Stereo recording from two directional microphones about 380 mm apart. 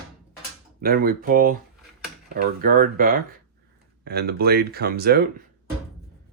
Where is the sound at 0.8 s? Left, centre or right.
Right.